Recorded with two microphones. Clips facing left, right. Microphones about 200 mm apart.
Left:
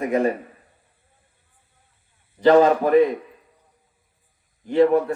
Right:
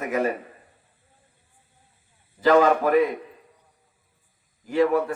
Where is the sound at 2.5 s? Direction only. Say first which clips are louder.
Left 3 dB; 35° left (ahead or behind).